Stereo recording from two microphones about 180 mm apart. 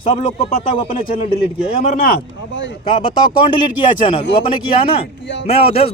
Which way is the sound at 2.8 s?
25° left (ahead or behind).